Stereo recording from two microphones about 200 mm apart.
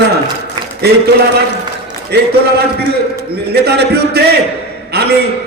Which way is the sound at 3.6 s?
55° right (ahead or behind).